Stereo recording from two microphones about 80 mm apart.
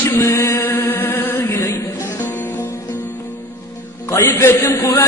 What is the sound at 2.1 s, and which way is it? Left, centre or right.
Music, left.